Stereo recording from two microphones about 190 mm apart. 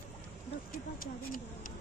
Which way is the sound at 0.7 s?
45° left (ahead or behind).